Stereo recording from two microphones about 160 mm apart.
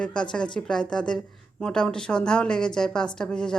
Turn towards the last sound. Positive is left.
turn(degrees=5)  # may be behind; listen again after turning